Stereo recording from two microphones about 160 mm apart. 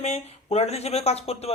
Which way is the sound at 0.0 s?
40° left (ahead or behind).